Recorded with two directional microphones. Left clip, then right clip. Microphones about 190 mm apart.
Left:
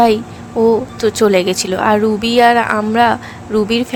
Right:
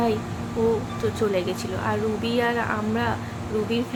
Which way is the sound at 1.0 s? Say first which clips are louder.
Left 12 dB; 60° left (ahead or behind).